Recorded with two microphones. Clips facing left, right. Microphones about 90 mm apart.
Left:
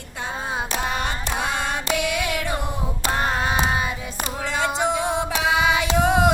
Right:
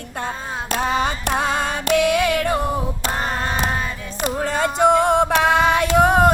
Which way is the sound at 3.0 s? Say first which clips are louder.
Left 5 dB; 15° left (ahead or behind).